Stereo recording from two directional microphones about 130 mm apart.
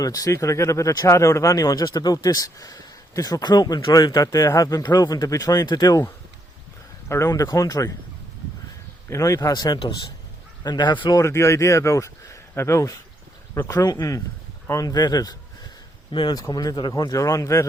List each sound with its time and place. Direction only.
0.0 s speech: 30° left (ahead or behind)
7.1 s speech: 25° left (ahead or behind)
9.0 s a man's voice: 25° left (ahead or behind)
11.2 s speech: 20° left (ahead or behind)